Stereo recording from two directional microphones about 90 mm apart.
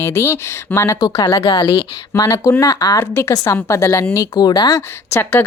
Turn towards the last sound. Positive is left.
turn(degrees=25)  # may be behind; listen again after turning